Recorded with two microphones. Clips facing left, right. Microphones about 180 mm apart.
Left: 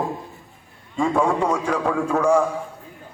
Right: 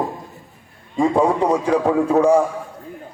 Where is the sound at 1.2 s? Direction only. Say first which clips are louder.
Right 4 dB; 30° right (ahead or behind).